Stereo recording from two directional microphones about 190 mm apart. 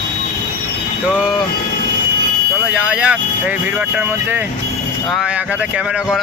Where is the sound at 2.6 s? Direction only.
5° right (ahead or behind).